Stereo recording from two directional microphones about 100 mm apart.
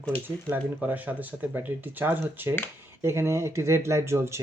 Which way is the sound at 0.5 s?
15° right (ahead or behind).